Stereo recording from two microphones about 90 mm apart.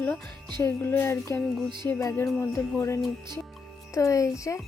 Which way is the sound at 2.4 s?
30° left (ahead or behind).